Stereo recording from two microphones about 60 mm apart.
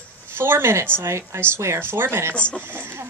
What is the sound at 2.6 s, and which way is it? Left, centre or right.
Speech, right.